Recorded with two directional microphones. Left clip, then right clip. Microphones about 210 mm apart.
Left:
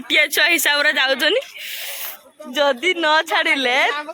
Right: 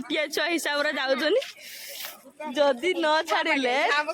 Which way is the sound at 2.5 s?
20° left (ahead or behind).